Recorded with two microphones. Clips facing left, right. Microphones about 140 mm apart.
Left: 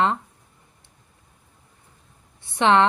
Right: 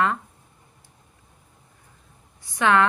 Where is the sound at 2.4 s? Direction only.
25° left (ahead or behind).